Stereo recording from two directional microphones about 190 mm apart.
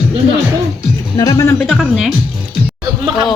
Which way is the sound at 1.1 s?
15° left (ahead or behind).